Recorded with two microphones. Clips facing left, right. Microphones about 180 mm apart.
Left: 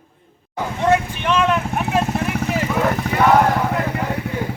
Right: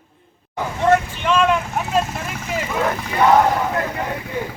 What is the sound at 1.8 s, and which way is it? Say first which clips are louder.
Vehicle: left 1 dB; 15° left (ahead or behind).